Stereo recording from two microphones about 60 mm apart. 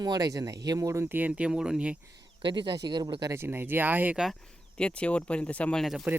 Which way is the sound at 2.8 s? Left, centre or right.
Right.